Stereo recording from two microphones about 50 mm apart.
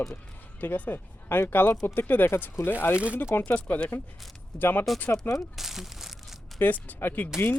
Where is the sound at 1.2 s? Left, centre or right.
Left.